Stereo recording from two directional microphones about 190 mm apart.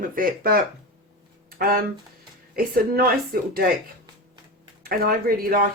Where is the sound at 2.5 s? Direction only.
50° right (ahead or behind).